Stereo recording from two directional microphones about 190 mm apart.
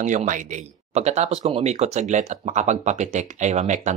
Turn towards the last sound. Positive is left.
turn(degrees=-35)  # may be behind; listen again after turning